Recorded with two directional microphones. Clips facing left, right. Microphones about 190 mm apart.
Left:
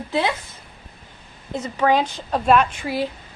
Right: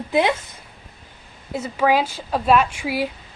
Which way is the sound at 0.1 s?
15° right (ahead or behind).